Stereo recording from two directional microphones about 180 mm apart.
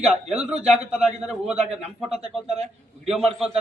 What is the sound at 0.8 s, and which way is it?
Speech, 5° right (ahead or behind).